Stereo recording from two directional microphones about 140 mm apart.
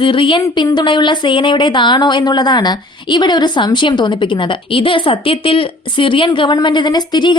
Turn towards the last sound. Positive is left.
turn(degrees=30)  # may be behind; listen again after turning